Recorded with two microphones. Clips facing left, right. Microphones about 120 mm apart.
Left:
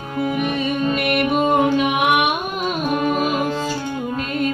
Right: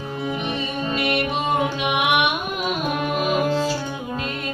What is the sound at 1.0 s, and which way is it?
Music, 55° left (ahead or behind).